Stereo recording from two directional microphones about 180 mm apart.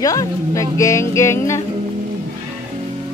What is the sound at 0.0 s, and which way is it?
Speech, 20° left (ahead or behind).